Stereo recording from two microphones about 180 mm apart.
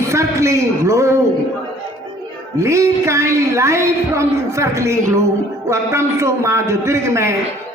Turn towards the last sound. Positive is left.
turn(degrees=-15)  # may be behind; listen again after turning